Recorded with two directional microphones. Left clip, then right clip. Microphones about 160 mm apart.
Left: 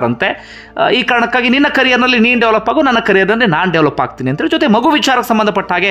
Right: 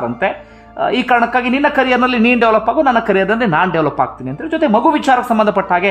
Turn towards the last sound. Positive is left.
turn(degrees=10)  # may be behind; listen again after turning